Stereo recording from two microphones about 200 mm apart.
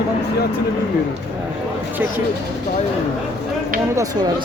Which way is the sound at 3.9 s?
20° right (ahead or behind).